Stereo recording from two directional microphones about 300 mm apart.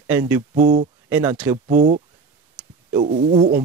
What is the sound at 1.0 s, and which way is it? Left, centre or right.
Speech, centre.